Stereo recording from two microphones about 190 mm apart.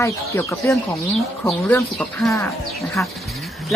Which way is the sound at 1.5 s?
5° left (ahead or behind).